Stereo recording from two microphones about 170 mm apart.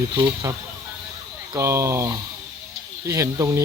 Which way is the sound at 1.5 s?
15° right (ahead or behind).